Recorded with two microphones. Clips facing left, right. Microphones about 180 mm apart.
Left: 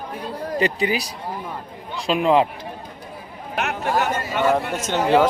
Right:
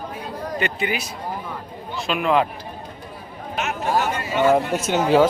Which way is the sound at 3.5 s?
65° left (ahead or behind).